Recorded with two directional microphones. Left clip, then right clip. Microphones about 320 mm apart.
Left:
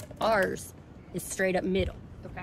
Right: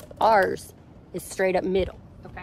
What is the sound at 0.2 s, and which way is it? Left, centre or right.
A woman's voice, centre.